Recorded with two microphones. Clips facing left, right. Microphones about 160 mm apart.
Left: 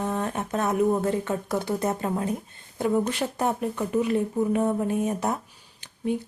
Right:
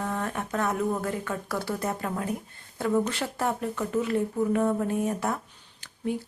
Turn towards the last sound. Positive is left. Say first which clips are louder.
# left 3 dB
turn(degrees=20)  # may be behind; listen again after turning